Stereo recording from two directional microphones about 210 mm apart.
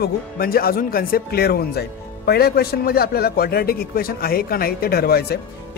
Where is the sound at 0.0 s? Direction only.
45° left (ahead or behind).